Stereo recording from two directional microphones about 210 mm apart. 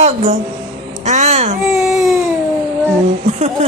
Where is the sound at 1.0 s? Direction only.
35° right (ahead or behind).